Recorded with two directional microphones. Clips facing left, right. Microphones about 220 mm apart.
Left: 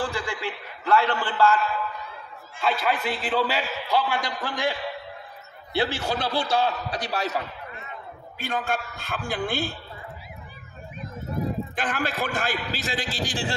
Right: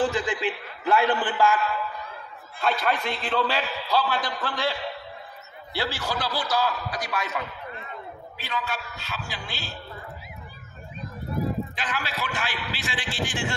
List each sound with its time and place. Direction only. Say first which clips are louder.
0.0 s a man's voice: right 4 dB; 20° right (ahead or behind)
2.6 s a man's voice: even; 5° left (ahead or behind); by 7.4 s 35° left (ahead or behind)
8.4 s a man's voice: left 5 dB; 50° left (ahead or behind)
11.7 s a man's voice: left 4 dB; 50° left (ahead or behind); by 13.6 s 35° left (ahead or behind)